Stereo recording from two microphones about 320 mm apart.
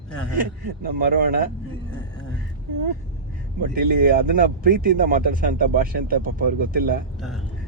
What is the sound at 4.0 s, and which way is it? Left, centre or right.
Speech, right.